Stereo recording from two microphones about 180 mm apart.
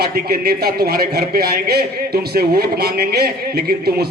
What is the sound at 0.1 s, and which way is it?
A man's voice, 55° right (ahead or behind).